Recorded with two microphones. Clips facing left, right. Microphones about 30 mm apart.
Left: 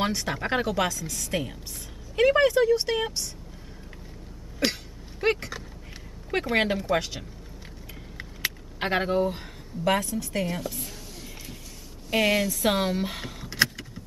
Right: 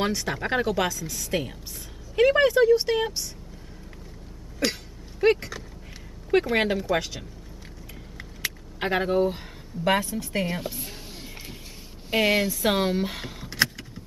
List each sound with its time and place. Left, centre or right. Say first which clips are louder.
0.0 s speech: right 1 dB; centre
4.6 s speech: even; left
5.2 s speech: right 4 dB; centre
8.2 s vehicle: left 2 dB; centre
9.8 s a woman's voice: right 1 dB; centre
12.6 s vehicle: right 1 dB; centre